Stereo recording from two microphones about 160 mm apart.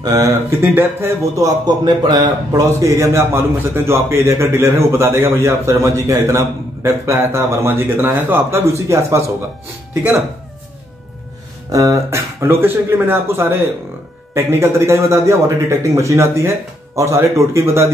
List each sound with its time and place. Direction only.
0.0 s speech: 20° right (ahead or behind)
11.7 s speech: 20° right (ahead or behind)